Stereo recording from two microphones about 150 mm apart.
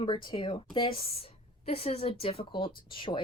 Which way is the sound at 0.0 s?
35° left (ahead or behind).